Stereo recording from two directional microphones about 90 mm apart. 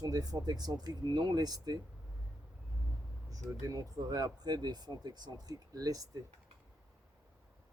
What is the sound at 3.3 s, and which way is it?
Speech, 40° right (ahead or behind).